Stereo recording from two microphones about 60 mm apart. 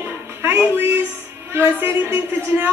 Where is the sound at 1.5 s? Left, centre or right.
Right.